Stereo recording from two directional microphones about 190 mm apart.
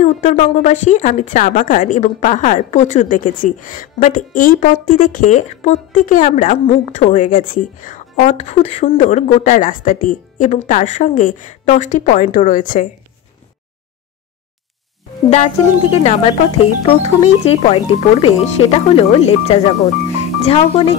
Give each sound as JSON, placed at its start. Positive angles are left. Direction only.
{"t": 0.0, "sound": "speech", "side_deg": 35}
{"t": 15.2, "sound": "speech", "side_deg": 35}